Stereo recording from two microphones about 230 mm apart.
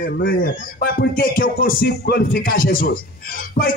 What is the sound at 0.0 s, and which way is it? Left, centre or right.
Speech, left.